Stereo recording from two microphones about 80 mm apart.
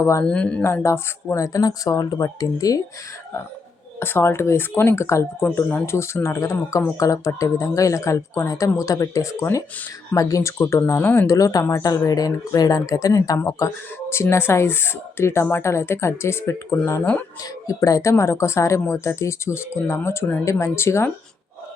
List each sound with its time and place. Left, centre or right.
0.0 s speech: left
0.3 s speech: centre
0.6 s speech: left
1.5 s speech: left
4.0 s speech: left
11.3 s speech: left
17.4 s speech: left